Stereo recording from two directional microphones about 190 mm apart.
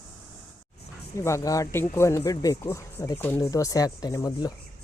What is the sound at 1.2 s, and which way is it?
Speech, 15° left (ahead or behind).